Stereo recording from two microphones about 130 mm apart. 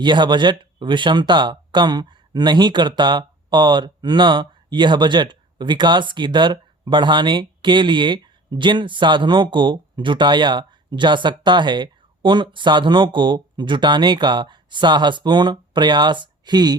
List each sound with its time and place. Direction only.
0.0 s speech: 35° right (ahead or behind)